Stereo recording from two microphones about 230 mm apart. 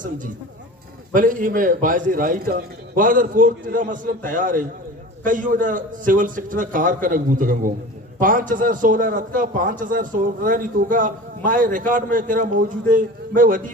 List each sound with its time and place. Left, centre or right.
1.1 s a man's voice: right